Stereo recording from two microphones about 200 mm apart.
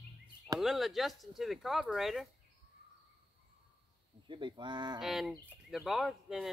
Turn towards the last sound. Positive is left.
turn(degrees=0)  # may be behind; listen again after turning